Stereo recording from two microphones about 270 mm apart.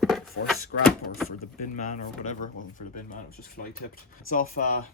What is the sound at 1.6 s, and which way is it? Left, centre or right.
Speech, left.